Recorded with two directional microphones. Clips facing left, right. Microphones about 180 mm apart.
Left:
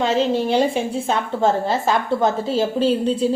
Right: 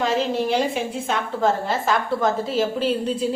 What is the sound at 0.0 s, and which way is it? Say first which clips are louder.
A woman's voice: left 3 dB; 30° left (ahead or behind).